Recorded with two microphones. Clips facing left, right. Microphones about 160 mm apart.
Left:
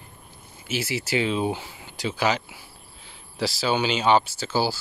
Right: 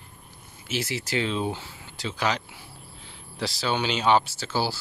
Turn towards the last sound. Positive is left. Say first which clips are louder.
# left 3 dB
turn(degrees=0)  # may be behind; listen again after turning